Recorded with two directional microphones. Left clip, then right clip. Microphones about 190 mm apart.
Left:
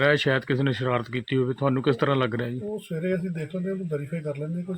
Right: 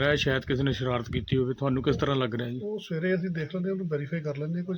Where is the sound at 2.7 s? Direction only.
15° right (ahead or behind).